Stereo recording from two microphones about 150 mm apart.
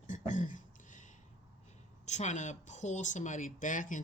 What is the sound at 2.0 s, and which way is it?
Speech, 50° left (ahead or behind).